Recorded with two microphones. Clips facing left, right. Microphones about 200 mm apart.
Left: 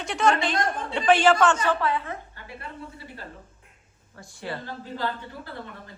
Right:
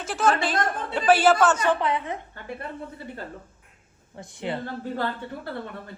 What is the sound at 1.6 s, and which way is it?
Speech, 20° right (ahead or behind).